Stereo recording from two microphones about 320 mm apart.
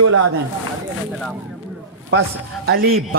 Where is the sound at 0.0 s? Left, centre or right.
Right.